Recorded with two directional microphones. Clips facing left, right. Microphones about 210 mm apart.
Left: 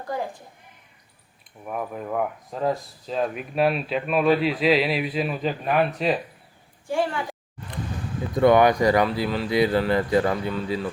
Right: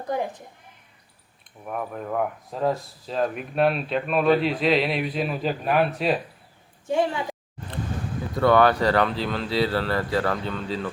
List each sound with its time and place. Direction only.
0.0 s a woman's voice: 20° right (ahead or behind)
1.6 s speech: 5° left (ahead or behind)
6.8 s a woman's voice: 20° right (ahead or behind)
8.4 s speech: 15° left (ahead or behind)